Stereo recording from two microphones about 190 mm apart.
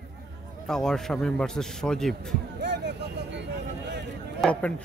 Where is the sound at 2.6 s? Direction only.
65° right (ahead or behind).